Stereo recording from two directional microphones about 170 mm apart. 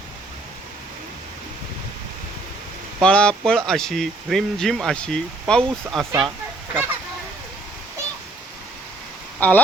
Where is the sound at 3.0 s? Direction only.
5° left (ahead or behind).